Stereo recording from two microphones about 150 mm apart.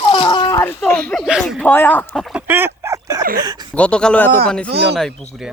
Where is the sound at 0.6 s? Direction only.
15° left (ahead or behind).